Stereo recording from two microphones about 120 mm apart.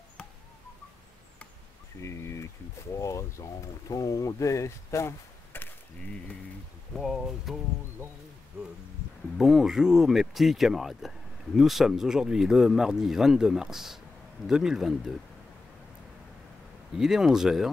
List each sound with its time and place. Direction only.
2.0 s a sound: 25° left (ahead or behind)
3.0 s speech: 25° left (ahead or behind)
7.0 s speech: centre (ahead or behind)
9.4 s speech: 5° right (ahead or behind)
16.9 s speech: 5° right (ahead or behind)